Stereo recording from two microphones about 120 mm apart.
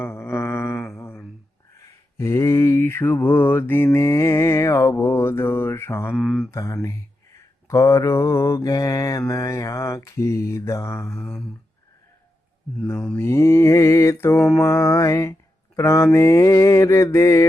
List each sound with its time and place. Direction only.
0.0 s mantra: 20° left (ahead or behind)
2.1 s mantra: 25° left (ahead or behind)
6.1 s mantra: 5° left (ahead or behind)
6.5 s mantra: 25° left (ahead or behind)
13.1 s mantra: 20° left (ahead or behind)
14.3 s mantra: 5° left (ahead or behind)
14.6 s mantra: 25° left (ahead or behind)